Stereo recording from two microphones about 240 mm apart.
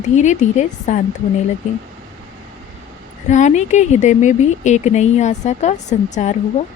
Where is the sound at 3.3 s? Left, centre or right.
Left.